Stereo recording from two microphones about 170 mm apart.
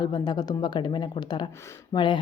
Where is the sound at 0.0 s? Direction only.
25° left (ahead or behind).